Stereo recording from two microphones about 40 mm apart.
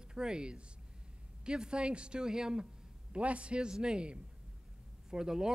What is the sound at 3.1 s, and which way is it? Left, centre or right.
A man's voice, right.